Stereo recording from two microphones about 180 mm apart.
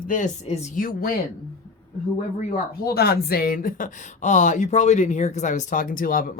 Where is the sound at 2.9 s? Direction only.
60° left (ahead or behind).